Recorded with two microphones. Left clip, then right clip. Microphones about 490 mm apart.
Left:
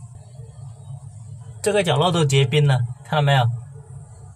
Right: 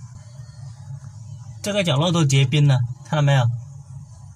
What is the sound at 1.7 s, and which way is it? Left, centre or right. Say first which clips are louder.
Speech: left 1 dB; left.